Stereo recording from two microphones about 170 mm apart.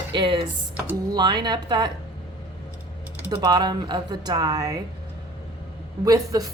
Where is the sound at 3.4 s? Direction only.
25° right (ahead or behind).